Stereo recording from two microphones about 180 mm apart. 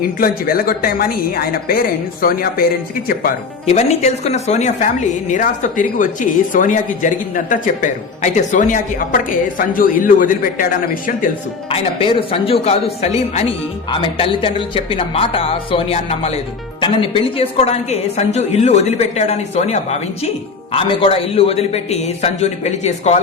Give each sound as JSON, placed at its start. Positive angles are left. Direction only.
{"t": 0.2, "sound": "a woman's voice", "side_deg": 55}
{"t": 3.7, "sound": "a woman's voice", "side_deg": 40}
{"t": 11.7, "sound": "speech", "side_deg": 30}